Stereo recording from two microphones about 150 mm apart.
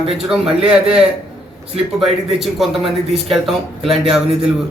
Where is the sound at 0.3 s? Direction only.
5° right (ahead or behind).